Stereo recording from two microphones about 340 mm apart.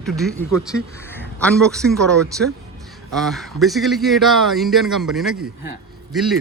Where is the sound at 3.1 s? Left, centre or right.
Centre.